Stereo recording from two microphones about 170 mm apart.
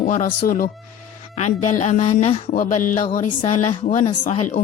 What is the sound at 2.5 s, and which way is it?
A woman's voice, 50° left (ahead or behind).